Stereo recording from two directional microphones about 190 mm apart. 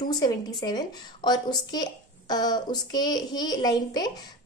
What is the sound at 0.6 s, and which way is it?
A woman's voice, 20° left (ahead or behind).